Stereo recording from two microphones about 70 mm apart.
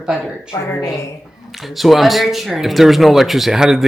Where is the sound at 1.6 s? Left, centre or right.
Centre.